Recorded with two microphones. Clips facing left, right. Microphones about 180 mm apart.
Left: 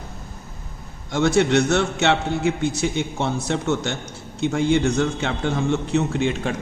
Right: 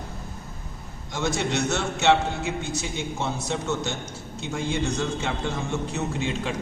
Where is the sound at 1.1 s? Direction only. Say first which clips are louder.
Left 9 dB; 60° left (ahead or behind).